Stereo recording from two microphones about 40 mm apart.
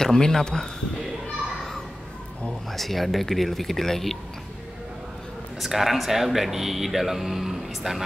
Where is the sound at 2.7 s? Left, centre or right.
Centre.